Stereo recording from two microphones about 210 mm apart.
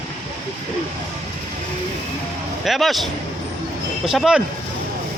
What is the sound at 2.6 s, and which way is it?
Speech, centre (ahead or behind).